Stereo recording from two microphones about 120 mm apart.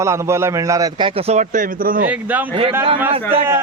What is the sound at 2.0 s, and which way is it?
Speech, 15° right (ahead or behind).